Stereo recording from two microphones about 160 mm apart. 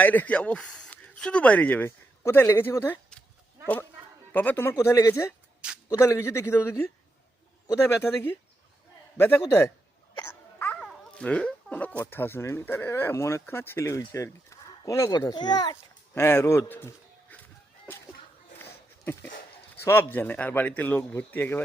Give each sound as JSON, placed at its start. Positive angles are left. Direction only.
{"t": 0.0, "sound": "speech", "side_deg": 10}
{"t": 4.3, "sound": "a man's voice", "side_deg": 10}
{"t": 10.2, "sound": "cough", "side_deg": 15}
{"t": 10.8, "sound": "speech", "side_deg": 5}
{"t": 18.6, "sound": "a sound", "side_deg": 15}
{"t": 19.8, "sound": "speech", "side_deg": 15}